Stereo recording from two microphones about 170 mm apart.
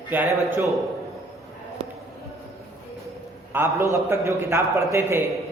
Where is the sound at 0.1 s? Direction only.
15° right (ahead or behind).